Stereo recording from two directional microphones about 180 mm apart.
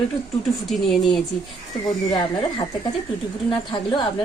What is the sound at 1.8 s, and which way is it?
Speech, 25° left (ahead or behind).